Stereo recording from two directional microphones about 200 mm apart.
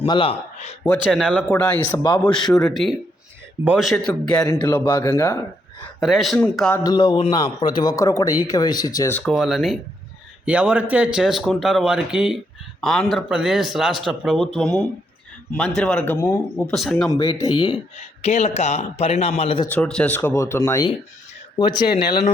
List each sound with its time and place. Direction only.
0.0 s a man's voice: 25° left (ahead or behind)
1.0 s speech: 5° left (ahead or behind); by 2.2 s 20° left (ahead or behind)
2.2 s speech: 5° left (ahead or behind)
4.4 s a man's voice: 20° left (ahead or behind)
6.0 s speech: centre (ahead or behind)
6.8 s a man's voice: 20° left (ahead or behind); by 17.1 s centre (ahead or behind)
17.2 s a man's voice: 30° left (ahead or behind)
18.2 s speech: 30° left (ahead or behind)
19.7 s a man's voice: 5° left (ahead or behind); by 22.2 s 20° left (ahead or behind)